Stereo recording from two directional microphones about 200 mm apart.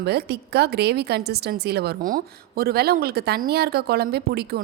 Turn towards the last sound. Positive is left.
turn(degrees=-50)  # may be behind; listen again after turning